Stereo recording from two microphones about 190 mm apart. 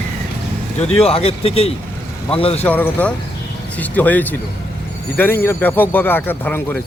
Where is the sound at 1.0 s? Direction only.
30° left (ahead or behind).